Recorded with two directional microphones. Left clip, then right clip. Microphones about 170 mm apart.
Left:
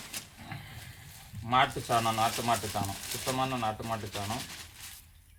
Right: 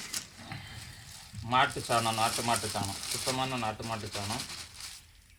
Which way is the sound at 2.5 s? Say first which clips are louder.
Left 1 dB; centre (ahead or behind).